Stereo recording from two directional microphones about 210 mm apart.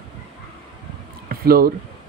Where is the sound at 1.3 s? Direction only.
45° right (ahead or behind).